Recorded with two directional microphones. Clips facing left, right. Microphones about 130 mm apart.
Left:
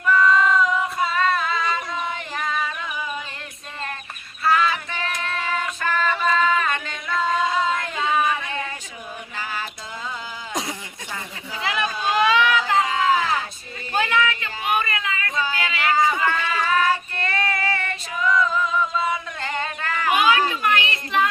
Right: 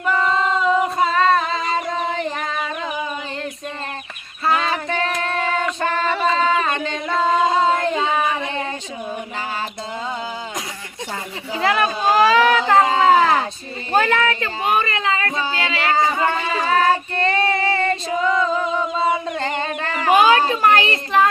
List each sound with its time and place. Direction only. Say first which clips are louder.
0.0 s female singing: left 1 dB; 30° right (ahead or behind)
4.4 s child singing: right 1 dB; 35° right (ahead or behind)
6.3 s music: right 2 dB; 35° right (ahead or behind)
11.1 s a sound: right 6 dB; 45° right (ahead or behind)